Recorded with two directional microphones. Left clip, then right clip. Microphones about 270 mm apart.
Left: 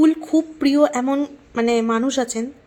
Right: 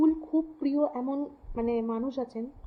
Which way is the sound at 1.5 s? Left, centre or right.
Left.